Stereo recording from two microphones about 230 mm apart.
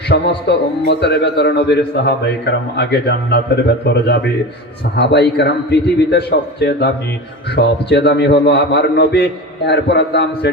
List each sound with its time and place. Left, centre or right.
0.1 s a man's voice: left